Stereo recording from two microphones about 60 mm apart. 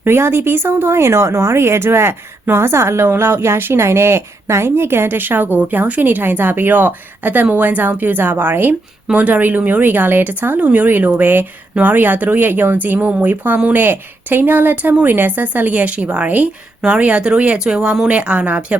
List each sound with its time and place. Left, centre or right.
0.0 s a woman's voice: right